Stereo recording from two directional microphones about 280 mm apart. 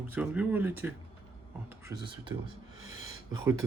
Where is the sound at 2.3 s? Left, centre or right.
Centre.